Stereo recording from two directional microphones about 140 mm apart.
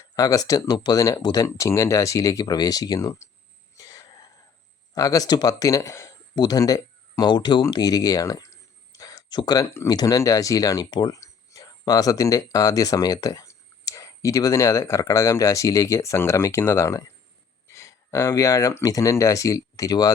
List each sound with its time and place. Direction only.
0.0 s speech: 25° left (ahead or behind)
3.8 s throat clearing: 25° left (ahead or behind)
4.9 s speech: 25° left (ahead or behind)